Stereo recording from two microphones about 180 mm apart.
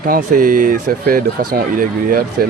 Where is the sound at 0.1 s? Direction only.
50° right (ahead or behind).